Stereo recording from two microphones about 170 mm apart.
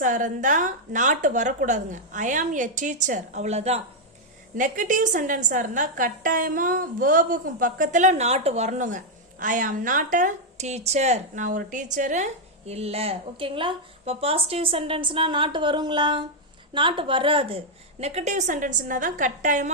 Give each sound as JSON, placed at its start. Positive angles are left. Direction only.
{"t": 0.0, "sound": "a woman's voice", "side_deg": -50}
{"t": 18.0, "sound": "a woman's voice", "side_deg": -40}